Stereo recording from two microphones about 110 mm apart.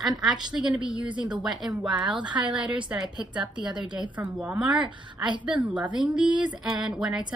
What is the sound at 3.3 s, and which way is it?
A woman's voice, 45° right (ahead or behind).